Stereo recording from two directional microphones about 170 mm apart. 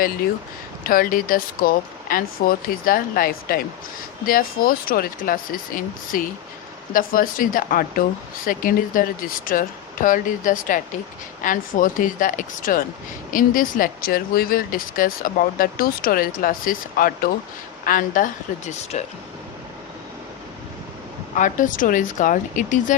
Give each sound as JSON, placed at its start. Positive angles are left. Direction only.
{"t": 0.9, "sound": "speech", "side_deg": 55}
{"t": 21.3, "sound": "speech", "side_deg": 50}